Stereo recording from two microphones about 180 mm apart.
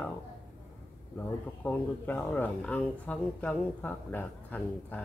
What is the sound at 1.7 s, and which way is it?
Speech, 10° left (ahead or behind).